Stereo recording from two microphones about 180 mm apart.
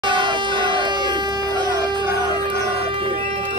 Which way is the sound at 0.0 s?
25° right (ahead or behind).